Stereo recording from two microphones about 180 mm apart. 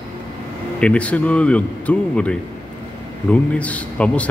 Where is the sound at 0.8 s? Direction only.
5° left (ahead or behind).